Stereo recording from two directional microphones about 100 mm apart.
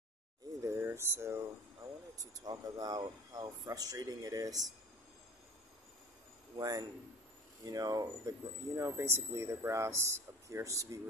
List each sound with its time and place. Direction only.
0.6 s speech: 25° right (ahead or behind)
2.1 s speech: 40° right (ahead or behind)
6.5 s speech: 40° right (ahead or behind)